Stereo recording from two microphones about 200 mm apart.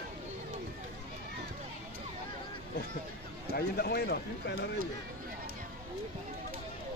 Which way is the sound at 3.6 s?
50° left (ahead or behind).